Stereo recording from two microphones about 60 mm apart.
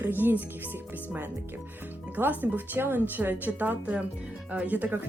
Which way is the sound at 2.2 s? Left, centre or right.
Right.